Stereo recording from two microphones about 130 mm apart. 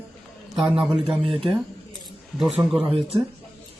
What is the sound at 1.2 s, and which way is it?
Speech, 45° right (ahead or behind).